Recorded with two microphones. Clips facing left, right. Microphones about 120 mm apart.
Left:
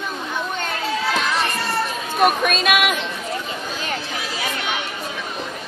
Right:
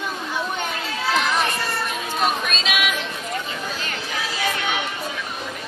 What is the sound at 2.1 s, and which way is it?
Speech, 55° left (ahead or behind).